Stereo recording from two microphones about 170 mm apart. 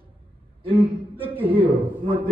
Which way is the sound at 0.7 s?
30° right (ahead or behind).